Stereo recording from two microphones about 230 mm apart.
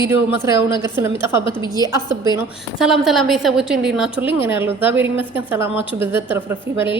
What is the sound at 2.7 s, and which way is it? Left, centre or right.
A woman's voice, centre.